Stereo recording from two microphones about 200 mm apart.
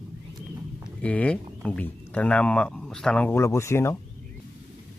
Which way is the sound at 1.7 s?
5° left (ahead or behind).